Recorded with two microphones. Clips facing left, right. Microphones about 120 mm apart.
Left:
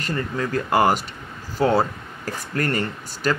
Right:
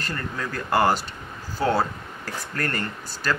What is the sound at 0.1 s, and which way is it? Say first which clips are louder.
Speech: left 8 dB; 15° left (ahead or behind).